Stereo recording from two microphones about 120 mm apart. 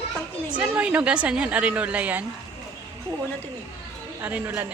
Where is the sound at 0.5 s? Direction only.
10° right (ahead or behind).